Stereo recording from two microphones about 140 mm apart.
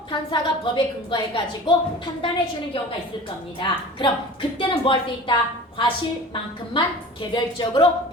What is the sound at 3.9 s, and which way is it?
A woman's voice, 35° left (ahead or behind).